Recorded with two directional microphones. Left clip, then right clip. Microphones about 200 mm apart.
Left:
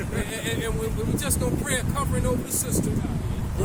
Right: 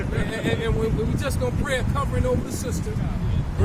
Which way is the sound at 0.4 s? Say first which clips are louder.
Right 5 dB; 25° left (ahead or behind).